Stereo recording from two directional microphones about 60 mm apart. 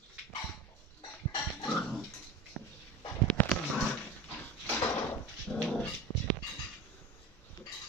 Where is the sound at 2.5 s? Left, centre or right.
Left.